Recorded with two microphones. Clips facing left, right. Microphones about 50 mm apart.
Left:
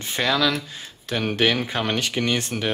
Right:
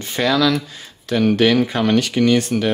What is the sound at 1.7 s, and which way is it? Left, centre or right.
Speech, centre.